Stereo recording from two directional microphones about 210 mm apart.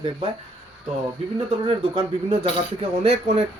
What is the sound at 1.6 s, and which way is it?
Speech, 25° right (ahead or behind).